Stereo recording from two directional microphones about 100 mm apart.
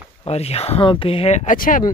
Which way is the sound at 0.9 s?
65° left (ahead or behind).